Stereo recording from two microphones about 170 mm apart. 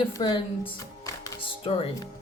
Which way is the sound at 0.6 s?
15° left (ahead or behind).